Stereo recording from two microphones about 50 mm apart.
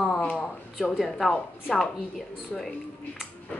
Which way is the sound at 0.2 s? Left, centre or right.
Left.